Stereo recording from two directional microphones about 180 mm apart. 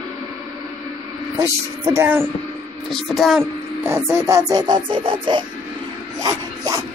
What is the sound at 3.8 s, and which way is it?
Music, 15° right (ahead or behind).